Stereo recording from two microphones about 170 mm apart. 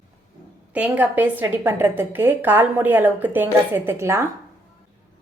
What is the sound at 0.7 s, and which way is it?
A woman's voice, 10° right (ahead or behind).